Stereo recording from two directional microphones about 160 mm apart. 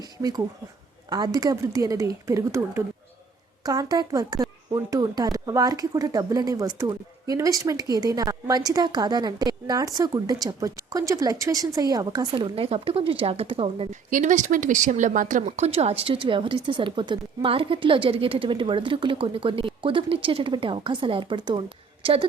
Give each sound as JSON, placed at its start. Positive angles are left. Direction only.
{"t": 0.0, "sound": "speech", "side_deg": -25}
{"t": 13.9, "sound": "a woman's voice", "side_deg": -50}